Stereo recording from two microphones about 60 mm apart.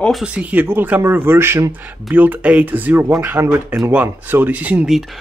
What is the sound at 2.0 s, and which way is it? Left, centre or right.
Speech, right.